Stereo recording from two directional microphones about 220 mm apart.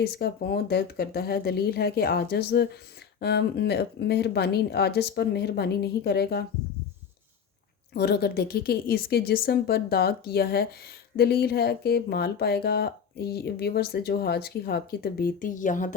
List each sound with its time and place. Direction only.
0.0 s speech: 45° left (ahead or behind)
7.9 s speech: 45° left (ahead or behind)